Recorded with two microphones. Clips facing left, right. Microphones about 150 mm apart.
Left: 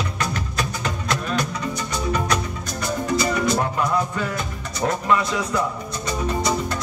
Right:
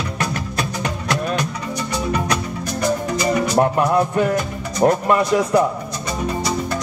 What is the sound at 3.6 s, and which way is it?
Music, 55° right (ahead or behind).